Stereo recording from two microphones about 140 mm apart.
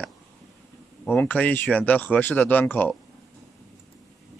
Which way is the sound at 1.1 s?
10° left (ahead or behind).